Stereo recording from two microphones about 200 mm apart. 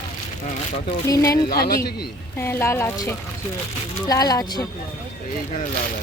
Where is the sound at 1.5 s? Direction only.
50° left (ahead or behind).